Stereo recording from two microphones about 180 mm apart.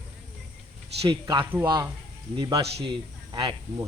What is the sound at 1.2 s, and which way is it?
Speech, 25° right (ahead or behind).